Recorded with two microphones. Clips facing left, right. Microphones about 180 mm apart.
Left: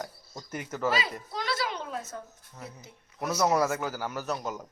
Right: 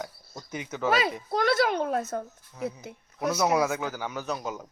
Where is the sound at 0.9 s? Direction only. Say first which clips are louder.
Right 5 dB; 55° right (ahead or behind).